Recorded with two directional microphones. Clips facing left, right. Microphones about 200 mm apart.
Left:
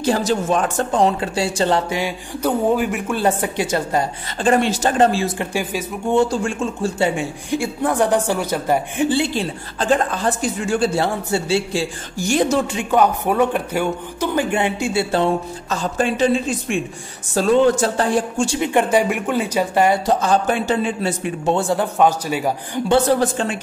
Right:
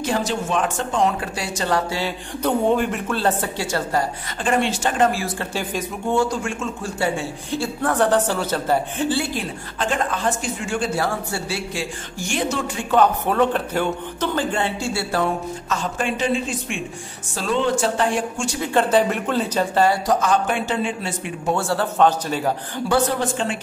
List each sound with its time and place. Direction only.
0.0 s speech: 35° left (ahead or behind)
1.9 s speech: 15° left (ahead or behind)
4.4 s speech: 40° left (ahead or behind); by 5.9 s 10° left (ahead or behind)
6.1 s speech: 30° left (ahead or behind)
11.0 s speech: 25° left (ahead or behind)
12.7 s speech: 10° left (ahead or behind); by 18.6 s 35° left (ahead or behind)
18.6 s speech: 15° left (ahead or behind)
20.1 s speech: 30° left (ahead or behind)
21.5 s speech: 15° left (ahead or behind)